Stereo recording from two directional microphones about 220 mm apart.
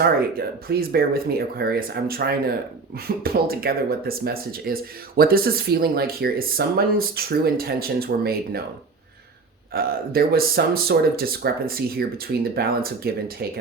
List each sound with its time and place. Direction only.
0.0 s speech: 45° right (ahead or behind)
9.7 s speech: 45° right (ahead or behind)